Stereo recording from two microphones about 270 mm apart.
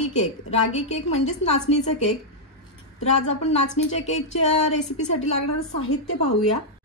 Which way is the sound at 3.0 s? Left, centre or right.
Left.